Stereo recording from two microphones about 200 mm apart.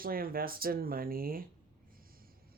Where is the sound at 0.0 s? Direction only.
45° right (ahead or behind).